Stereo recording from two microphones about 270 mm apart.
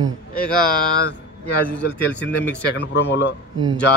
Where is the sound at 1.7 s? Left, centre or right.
Centre.